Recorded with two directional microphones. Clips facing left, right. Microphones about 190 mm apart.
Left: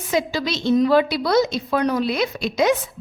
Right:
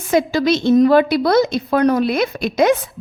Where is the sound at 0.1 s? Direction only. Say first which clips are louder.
Right 7 dB; 50° right (ahead or behind).